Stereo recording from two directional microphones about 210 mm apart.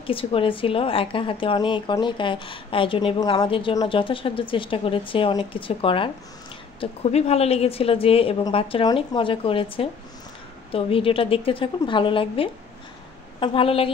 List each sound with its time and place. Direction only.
0.0 s a woman's voice: 25° left (ahead or behind)